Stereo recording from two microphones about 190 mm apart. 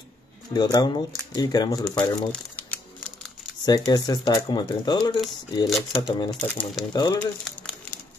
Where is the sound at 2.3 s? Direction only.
10° left (ahead or behind).